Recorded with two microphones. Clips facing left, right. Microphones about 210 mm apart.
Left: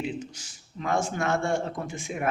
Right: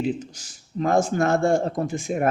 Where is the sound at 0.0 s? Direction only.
40° right (ahead or behind).